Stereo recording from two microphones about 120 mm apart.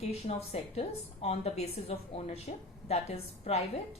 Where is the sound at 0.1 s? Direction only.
60° left (ahead or behind).